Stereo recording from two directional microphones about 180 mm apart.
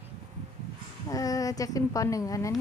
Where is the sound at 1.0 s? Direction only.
20° left (ahead or behind).